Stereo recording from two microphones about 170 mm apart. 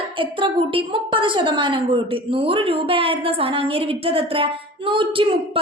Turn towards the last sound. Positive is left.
turn(degrees=-30)  # may be behind; listen again after turning